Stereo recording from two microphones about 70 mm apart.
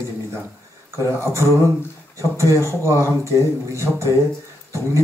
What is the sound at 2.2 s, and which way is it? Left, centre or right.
A man's voice, right.